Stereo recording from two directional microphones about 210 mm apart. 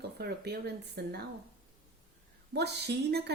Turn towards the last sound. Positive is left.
turn(degrees=-50)  # may be behind; listen again after turning